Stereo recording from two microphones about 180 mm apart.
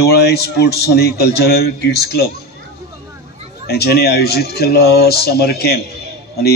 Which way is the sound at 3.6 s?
65° left (ahead or behind).